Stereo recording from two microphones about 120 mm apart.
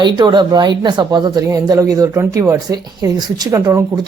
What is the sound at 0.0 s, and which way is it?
Speech, 40° right (ahead or behind).